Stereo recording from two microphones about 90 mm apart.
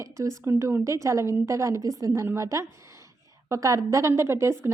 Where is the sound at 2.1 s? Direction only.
30° right (ahead or behind).